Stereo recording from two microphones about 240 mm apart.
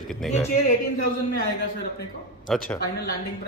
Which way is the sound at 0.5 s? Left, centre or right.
Left.